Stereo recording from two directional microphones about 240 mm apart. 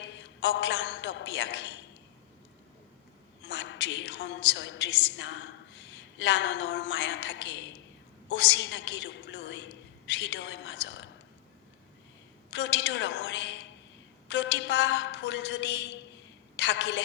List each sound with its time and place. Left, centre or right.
0.0 s a man's voice: left
3.4 s a woman's voice: left
12.5 s a woman's voice: left